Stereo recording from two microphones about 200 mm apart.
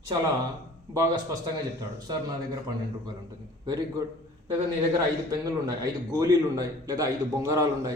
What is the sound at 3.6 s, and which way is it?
Speech, 20° right (ahead or behind).